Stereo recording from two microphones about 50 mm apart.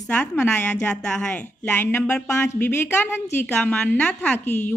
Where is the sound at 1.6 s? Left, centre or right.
Left.